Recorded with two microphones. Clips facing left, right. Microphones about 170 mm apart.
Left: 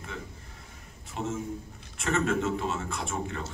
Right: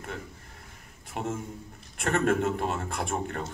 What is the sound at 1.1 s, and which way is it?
A man's voice, 55° right (ahead or behind).